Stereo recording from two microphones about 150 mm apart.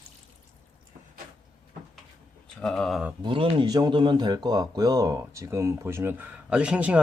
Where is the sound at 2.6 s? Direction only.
5° left (ahead or behind).